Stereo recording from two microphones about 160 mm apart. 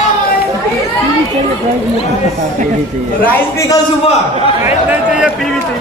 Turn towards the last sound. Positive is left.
turn(degrees=-5)  # may be behind; listen again after turning